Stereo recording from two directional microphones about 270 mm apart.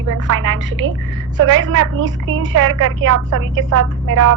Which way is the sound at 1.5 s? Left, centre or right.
Right.